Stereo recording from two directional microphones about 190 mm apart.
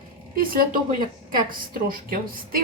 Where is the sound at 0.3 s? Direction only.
50° right (ahead or behind).